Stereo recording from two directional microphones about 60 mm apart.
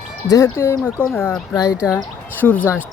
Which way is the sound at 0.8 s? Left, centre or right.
Left.